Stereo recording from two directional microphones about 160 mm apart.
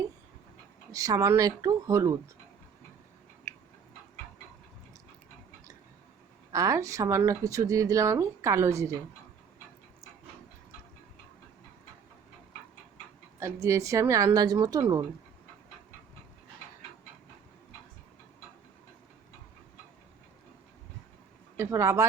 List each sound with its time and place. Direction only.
0.9 s speech: 20° right (ahead or behind)
6.5 s speech: 20° right (ahead or behind)
13.4 s speech: 20° right (ahead or behind)
21.6 s speech: 20° right (ahead or behind)